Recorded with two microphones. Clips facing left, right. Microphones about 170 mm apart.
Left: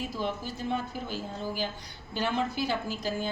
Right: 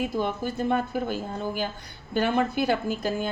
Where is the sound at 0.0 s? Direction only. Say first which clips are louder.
Right 6 dB; 55° right (ahead or behind).